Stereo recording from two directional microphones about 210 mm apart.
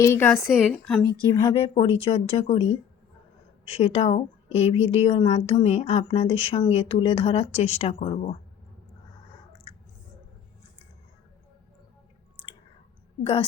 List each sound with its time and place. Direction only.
0.0 s a woman's voice: 10° left (ahead or behind)
0.3 s a woman's voice: centre (ahead or behind)
1.2 s speech: 20° left (ahead or behind)
3.7 s speech: 30° left (ahead or behind)